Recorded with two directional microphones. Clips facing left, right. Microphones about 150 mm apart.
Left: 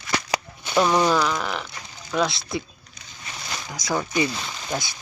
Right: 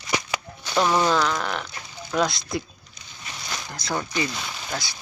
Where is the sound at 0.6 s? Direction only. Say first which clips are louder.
Left 1 dB; centre (ahead or behind).